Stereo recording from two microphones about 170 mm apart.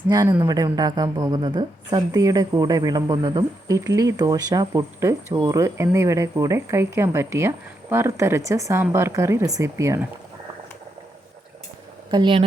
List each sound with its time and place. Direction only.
0.1 s speech: 20° right (ahead or behind)
12.1 s speech: 30° right (ahead or behind)